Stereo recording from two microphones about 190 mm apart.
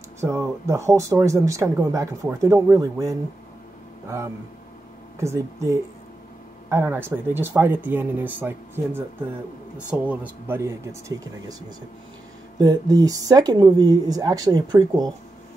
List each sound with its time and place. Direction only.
0.2 s speech: 15° right (ahead or behind)
5.2 s speech: 15° right (ahead or behind)
12.5 s speech: 20° right (ahead or behind)